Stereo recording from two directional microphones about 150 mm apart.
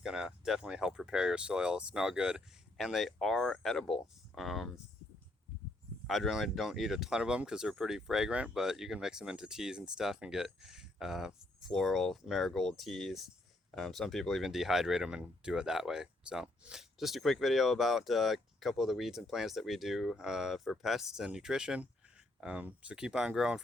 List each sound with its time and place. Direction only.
0.0 s speech: 5° right (ahead or behind)
6.1 s speech: centre (ahead or behind)